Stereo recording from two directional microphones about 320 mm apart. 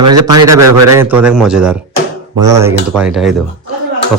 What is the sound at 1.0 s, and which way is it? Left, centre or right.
A man's voice, centre.